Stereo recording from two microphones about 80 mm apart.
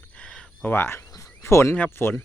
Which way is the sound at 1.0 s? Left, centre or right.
Left.